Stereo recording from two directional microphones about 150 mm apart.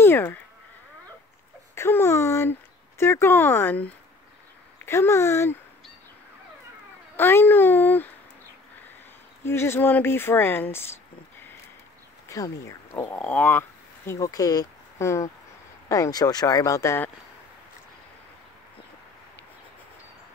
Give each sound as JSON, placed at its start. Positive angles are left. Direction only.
{"t": 0.0, "sound": "insect", "side_deg": 15}
{"t": 1.8, "sound": "a sound", "side_deg": 15}
{"t": 3.0, "sound": "speech", "side_deg": 15}
{"t": 7.2, "sound": "speech", "side_deg": 15}
{"t": 9.4, "sound": "speech", "side_deg": 15}